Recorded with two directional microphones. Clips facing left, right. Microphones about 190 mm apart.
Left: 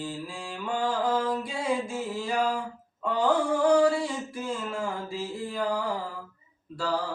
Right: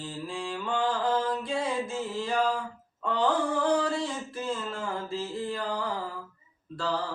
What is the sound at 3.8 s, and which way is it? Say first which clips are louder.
Mantra: left 5 dB; 10° left (ahead or behind).